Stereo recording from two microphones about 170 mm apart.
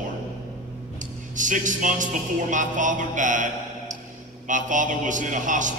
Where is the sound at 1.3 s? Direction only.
50° right (ahead or behind).